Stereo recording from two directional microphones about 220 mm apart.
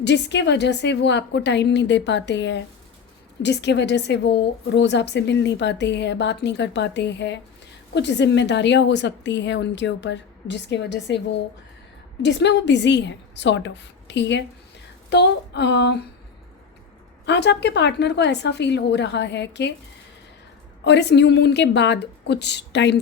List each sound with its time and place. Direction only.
0.0 s a woman's voice: 50° left (ahead or behind)
12.2 s a woman's voice: 50° left (ahead or behind)
17.2 s a woman's voice: 50° left (ahead or behind)
20.8 s a woman's voice: 50° left (ahead or behind)